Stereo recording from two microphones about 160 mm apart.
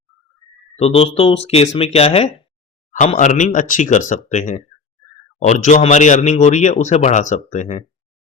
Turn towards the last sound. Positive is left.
turn(degrees=45)  # may be behind; listen again after turning